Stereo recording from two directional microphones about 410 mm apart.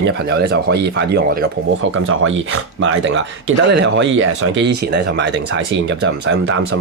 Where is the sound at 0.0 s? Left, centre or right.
Right.